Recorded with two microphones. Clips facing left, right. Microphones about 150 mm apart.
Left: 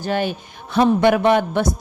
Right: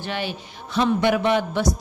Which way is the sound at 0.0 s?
45° left (ahead or behind).